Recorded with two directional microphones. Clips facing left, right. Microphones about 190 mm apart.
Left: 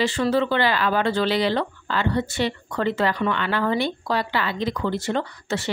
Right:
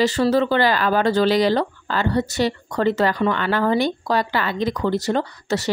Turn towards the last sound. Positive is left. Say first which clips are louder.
# right 4 dB
turn(degrees=-40)  # may be behind; listen again after turning